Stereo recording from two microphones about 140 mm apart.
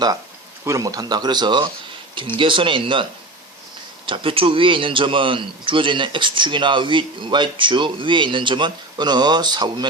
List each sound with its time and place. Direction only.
0.6 s a man's voice: 25° right (ahead or behind)